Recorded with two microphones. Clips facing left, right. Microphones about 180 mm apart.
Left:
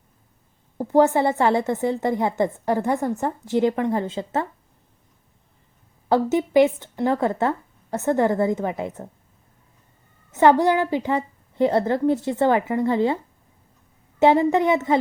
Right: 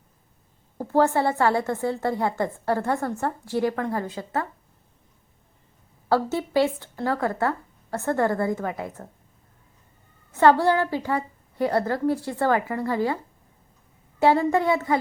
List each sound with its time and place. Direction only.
0.8 s a woman's voice: 15° left (ahead or behind)
6.1 s a woman's voice: 20° left (ahead or behind)
10.3 s a woman's voice: 20° left (ahead or behind)
14.2 s a woman's voice: 20° left (ahead or behind)